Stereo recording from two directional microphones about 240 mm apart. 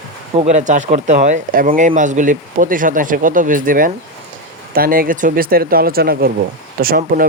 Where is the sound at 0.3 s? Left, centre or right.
Right.